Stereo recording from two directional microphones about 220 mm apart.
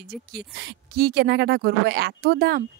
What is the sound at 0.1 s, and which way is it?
Speech, 45° right (ahead or behind).